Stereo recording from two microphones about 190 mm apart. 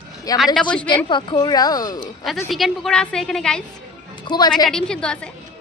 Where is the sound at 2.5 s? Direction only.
Centre (ahead or behind).